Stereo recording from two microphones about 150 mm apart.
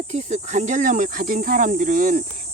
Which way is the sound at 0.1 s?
50° right (ahead or behind).